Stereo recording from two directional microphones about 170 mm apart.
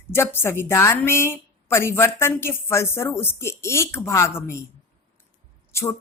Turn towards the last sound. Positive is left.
turn(degrees=15)  # may be behind; listen again after turning